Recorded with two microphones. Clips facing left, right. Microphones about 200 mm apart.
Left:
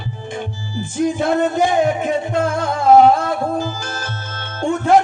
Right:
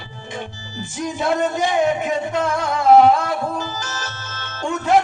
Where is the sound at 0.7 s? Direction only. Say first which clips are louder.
Left 8 dB; 55° left (ahead or behind).